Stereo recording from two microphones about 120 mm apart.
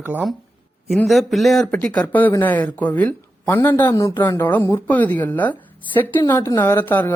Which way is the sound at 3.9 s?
35° left (ahead or behind).